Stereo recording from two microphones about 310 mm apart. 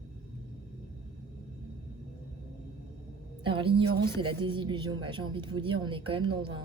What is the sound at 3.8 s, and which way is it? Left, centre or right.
Speech, right.